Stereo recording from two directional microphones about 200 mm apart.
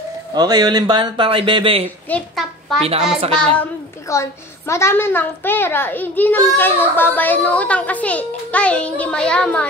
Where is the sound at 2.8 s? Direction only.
30° right (ahead or behind).